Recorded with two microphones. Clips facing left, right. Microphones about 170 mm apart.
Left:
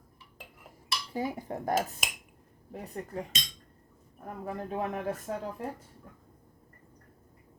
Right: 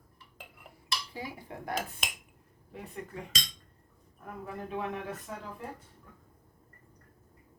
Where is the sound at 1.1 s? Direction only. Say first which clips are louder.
Left 8 dB; 45° left (ahead or behind).